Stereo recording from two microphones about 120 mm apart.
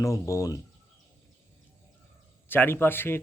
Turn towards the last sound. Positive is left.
turn(degrees=20)  # may be behind; listen again after turning